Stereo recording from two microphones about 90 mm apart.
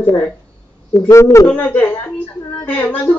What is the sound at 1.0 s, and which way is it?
Speech, 30° left (ahead or behind).